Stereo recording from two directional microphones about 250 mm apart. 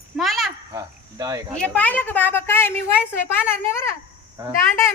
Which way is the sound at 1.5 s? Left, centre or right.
Centre.